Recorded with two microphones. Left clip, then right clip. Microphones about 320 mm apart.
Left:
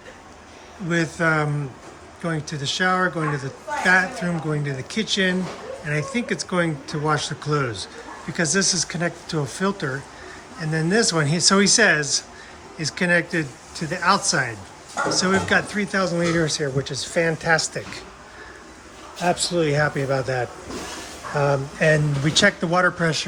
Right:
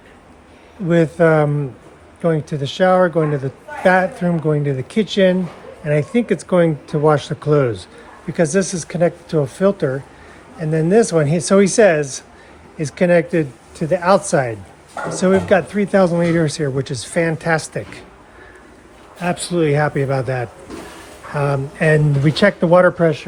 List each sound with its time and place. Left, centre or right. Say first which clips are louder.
0.9 s speech: right 8 dB; centre
19.4 s speech: right 4 dB; centre